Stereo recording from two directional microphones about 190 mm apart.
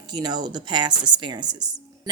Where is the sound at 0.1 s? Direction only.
20° right (ahead or behind).